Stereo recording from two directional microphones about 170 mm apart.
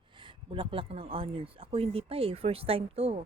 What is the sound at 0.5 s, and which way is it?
A woman's voice, 30° right (ahead or behind).